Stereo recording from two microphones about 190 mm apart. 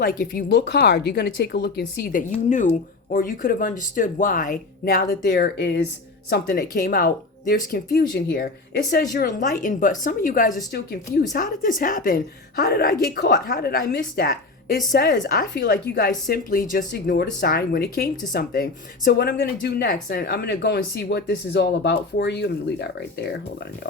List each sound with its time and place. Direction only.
0.0 s a woman's voice: 50° left (ahead or behind)
8.1 s speech: 65° left (ahead or behind)
9.1 s a woman's voice: 50° left (ahead or behind)